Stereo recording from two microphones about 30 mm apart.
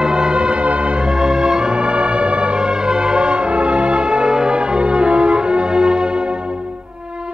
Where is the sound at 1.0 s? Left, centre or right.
Right.